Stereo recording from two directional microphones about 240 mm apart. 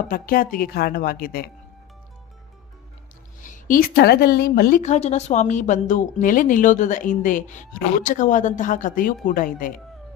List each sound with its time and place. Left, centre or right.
0.1 s a woman's voice: left
3.4 s a woman's voice: left